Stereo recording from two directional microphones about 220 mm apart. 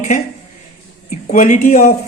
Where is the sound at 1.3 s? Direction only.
35° left (ahead or behind).